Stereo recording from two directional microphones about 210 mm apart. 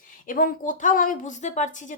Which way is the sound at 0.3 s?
40° left (ahead or behind).